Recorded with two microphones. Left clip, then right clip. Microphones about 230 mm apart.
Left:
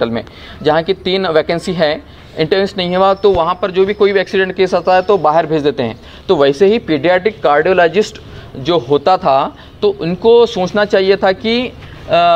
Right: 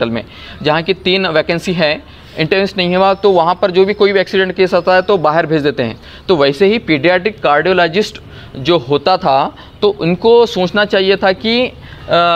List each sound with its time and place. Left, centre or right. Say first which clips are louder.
0.0 s speech: even; right